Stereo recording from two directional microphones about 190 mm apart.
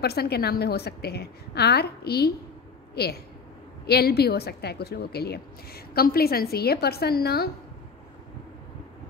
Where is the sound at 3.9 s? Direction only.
55° left (ahead or behind).